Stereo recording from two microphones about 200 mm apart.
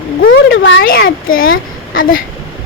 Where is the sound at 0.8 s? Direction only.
50° left (ahead or behind).